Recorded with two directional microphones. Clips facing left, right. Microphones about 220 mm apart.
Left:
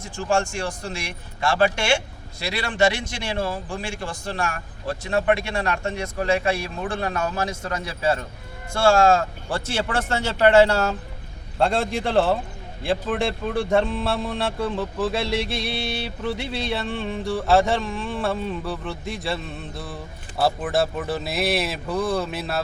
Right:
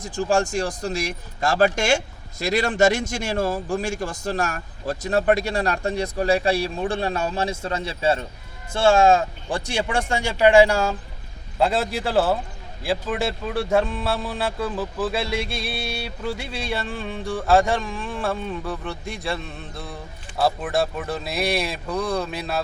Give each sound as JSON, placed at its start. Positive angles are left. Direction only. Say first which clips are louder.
{"t": 0.0, "sound": "a man's voice", "louder": "right 2 dB", "side_deg": -35}